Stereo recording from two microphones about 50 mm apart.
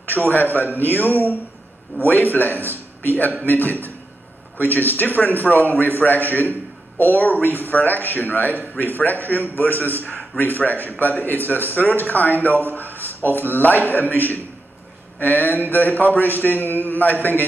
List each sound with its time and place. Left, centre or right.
0.3 s a man's voice: left